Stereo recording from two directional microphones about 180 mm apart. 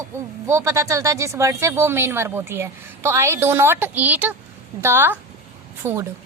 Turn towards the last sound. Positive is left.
turn(degrees=-15)  # may be behind; listen again after turning